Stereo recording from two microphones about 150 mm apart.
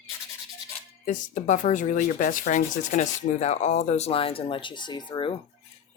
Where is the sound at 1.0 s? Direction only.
60° left (ahead or behind).